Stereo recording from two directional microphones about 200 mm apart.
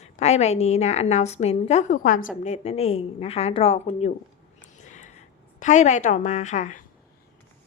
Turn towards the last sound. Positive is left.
turn(degrees=35)  # may be behind; listen again after turning